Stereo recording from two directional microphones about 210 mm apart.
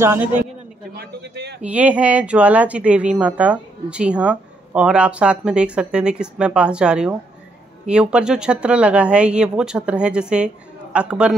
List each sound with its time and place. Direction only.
0.0 s a man's voice: 10° right (ahead or behind)
0.9 s a sound: 55° right (ahead or behind)
1.6 s speech: 5° right (ahead or behind)